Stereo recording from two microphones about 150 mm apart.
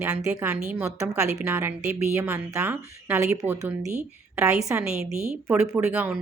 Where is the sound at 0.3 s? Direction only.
15° right (ahead or behind).